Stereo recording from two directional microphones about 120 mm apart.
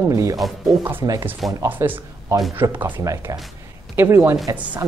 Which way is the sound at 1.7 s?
15° right (ahead or behind).